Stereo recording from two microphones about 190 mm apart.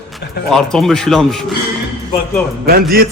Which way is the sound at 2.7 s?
50° right (ahead or behind).